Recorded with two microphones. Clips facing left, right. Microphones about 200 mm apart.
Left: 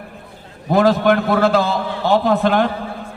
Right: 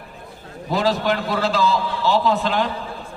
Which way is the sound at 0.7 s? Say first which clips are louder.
Left 6 dB; 55° left (ahead or behind).